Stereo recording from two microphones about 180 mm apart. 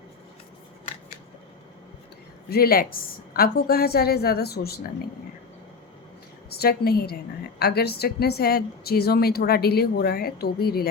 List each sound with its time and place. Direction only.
2.5 s a woman's voice: 55° left (ahead or behind)
6.5 s a woman's voice: 60° left (ahead or behind)